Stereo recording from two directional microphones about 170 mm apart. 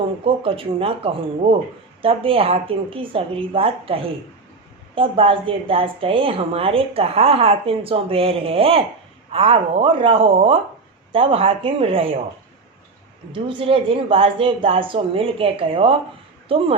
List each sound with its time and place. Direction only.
0.3 s a woman's voice: 35° right (ahead or behind)
13.3 s a woman's voice: 30° right (ahead or behind)